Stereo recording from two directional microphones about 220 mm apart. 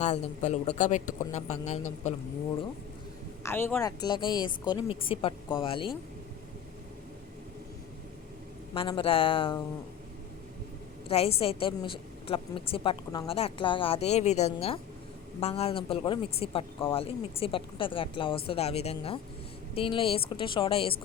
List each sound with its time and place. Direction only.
0.0 s speech: 30° left (ahead or behind)
3.4 s a woman's voice: 10° left (ahead or behind)
8.7 s a woman's voice: 25° left (ahead or behind)
11.1 s a woman's voice: 25° left (ahead or behind)